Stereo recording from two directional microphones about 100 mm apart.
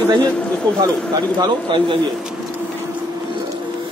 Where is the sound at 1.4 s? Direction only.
55° right (ahead or behind).